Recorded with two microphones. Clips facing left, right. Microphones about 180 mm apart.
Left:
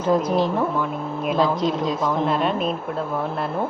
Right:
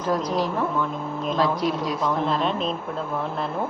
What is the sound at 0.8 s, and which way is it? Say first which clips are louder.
Speech: left 2 dB; 10° left (ahead or behind).